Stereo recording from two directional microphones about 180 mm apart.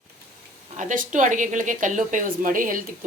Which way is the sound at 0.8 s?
45° right (ahead or behind).